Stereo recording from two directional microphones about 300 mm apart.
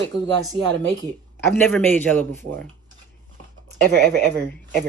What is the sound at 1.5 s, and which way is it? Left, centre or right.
Speech, centre.